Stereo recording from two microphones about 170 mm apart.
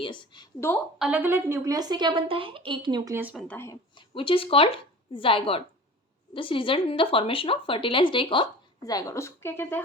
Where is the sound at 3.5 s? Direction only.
15° left (ahead or behind).